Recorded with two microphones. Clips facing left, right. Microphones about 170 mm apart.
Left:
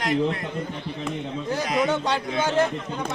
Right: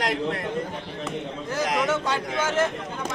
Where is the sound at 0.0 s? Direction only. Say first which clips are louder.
Left 3 dB; 75° right (ahead or behind).